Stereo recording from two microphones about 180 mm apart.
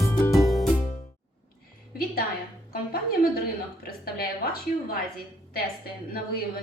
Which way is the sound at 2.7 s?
55° left (ahead or behind).